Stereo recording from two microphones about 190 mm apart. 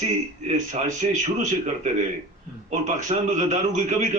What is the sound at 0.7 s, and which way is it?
A man's voice, 40° right (ahead or behind).